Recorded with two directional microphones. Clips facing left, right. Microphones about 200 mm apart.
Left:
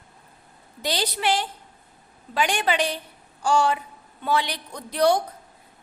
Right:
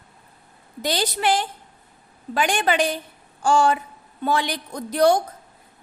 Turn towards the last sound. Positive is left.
turn(degrees=-45)  # may be behind; listen again after turning